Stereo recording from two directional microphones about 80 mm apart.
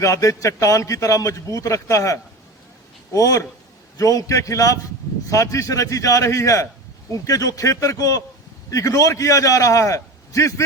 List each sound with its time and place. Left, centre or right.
0.0 s a man's voice: left